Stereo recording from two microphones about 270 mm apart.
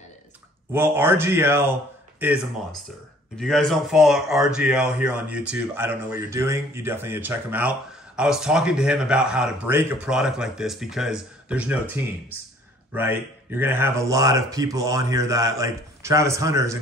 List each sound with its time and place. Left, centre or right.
0.7 s speech: centre